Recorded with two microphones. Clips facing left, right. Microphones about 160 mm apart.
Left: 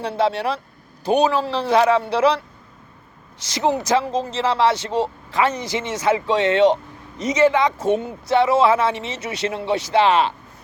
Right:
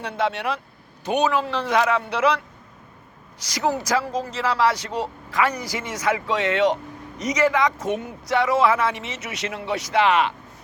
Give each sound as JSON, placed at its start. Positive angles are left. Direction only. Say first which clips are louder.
{"t": 0.0, "sound": "a man's voice", "louder": "left 4 dB", "side_deg": 30}